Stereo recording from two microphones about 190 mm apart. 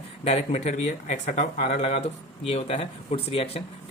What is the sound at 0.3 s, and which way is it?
Speech, 35° left (ahead or behind).